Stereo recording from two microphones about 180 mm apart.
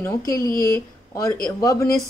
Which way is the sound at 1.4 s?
20° left (ahead or behind).